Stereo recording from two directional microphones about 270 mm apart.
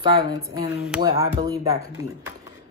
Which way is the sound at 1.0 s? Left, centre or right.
Centre.